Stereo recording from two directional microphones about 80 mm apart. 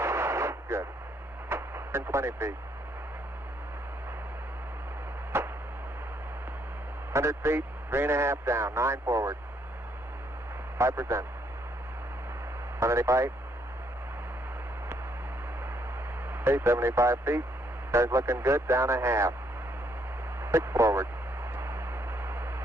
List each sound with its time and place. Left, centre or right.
0.0 s artillery fire: right
1.5 s speech: right
5.3 s chop: right
7.1 s a man's voice: right
10.8 s a man's voice: right
12.7 s a man's voice: right
16.4 s a man's voice: right
20.4 s speech: right
21.5 s a sound: right